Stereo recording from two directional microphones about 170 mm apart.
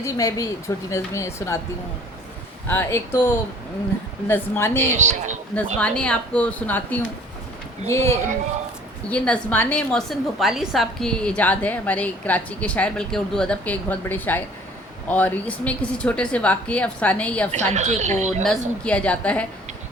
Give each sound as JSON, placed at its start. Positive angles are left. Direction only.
{"t": 0.0, "sound": "a woman's voice", "side_deg": 20}
{"t": 2.6, "sound": "a woman's voice", "side_deg": 15}
{"t": 4.9, "sound": "speech", "side_deg": -45}
{"t": 5.8, "sound": "a woman's voice", "side_deg": 5}
{"t": 17.5, "sound": "speech", "side_deg": -45}
{"t": 18.9, "sound": "a woman's voice", "side_deg": 5}